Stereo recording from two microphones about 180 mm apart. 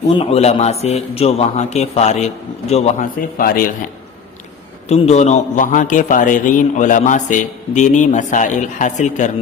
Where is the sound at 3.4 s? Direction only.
50° left (ahead or behind).